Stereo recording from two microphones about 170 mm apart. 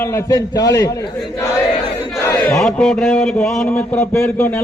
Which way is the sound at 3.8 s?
15° left (ahead or behind).